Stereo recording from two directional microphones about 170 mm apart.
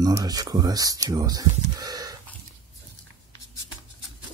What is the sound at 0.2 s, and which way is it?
Speech, 25° right (ahead or behind).